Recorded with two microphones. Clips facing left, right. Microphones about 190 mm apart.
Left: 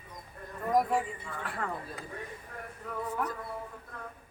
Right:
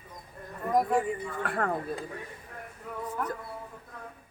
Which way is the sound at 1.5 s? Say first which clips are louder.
Right 6 dB; 55° right (ahead or behind).